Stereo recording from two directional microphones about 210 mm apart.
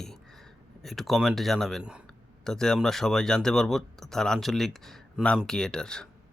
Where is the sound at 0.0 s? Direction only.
Centre (ahead or behind).